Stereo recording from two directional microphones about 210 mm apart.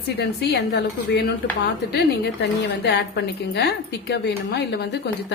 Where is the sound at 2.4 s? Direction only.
55° left (ahead or behind).